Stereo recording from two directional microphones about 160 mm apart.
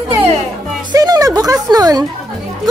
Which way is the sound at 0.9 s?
25° right (ahead or behind).